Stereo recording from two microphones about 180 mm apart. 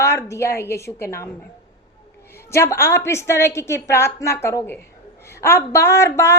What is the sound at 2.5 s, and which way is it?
A woman's voice, 15° left (ahead or behind).